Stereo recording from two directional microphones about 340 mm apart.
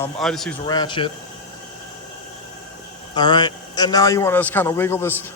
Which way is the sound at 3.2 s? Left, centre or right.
Centre.